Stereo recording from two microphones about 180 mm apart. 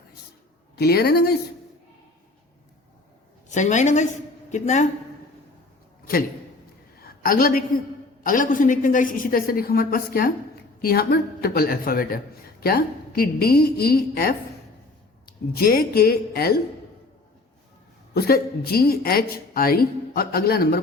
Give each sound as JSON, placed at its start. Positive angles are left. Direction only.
{"t": 0.8, "sound": "a woman's voice", "side_deg": 60}
{"t": 3.5, "sound": "a woman's voice", "side_deg": 40}
{"t": 7.2, "sound": "a woman's voice", "side_deg": 55}
{"t": 15.5, "sound": "a woman's voice", "side_deg": 55}
{"t": 18.1, "sound": "a woman's voice", "side_deg": 60}